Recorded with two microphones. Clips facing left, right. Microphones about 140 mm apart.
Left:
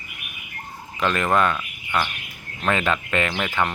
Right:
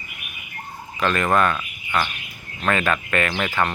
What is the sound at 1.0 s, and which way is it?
Speech, 15° left (ahead or behind).